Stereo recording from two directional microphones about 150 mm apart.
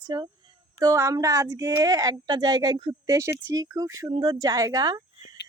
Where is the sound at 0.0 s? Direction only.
25° right (ahead or behind).